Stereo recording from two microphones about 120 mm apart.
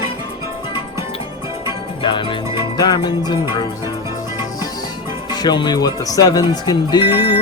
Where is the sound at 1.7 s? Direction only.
40° left (ahead or behind).